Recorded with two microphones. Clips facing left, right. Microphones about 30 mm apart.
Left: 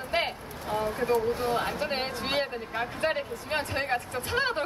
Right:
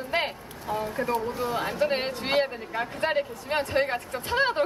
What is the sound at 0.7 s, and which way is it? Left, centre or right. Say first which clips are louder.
Speech: even; left.